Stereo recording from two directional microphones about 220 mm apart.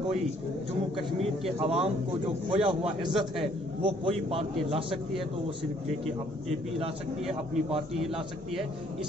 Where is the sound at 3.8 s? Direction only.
25° right (ahead or behind).